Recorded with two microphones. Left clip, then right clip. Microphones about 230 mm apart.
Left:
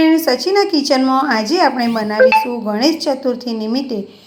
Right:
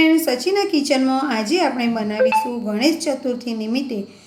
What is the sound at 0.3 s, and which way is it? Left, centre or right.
A woman's voice, centre.